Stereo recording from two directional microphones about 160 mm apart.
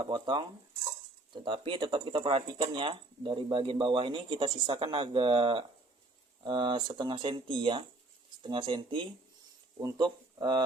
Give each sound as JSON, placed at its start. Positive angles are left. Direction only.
{"t": 0.0, "sound": "speech", "side_deg": -30}